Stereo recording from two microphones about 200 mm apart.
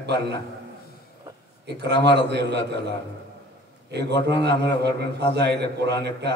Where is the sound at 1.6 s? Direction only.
60° right (ahead or behind).